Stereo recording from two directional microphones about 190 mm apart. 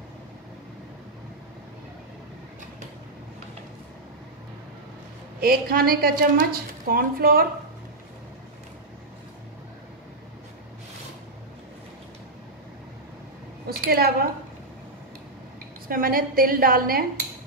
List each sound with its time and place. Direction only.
5.4 s a woman's voice: 50° right (ahead or behind)
13.7 s a sound: 55° right (ahead or behind)
15.9 s a woman's voice: 50° right (ahead or behind)